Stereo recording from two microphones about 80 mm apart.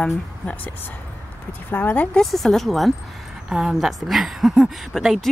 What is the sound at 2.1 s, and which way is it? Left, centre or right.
Speech, centre.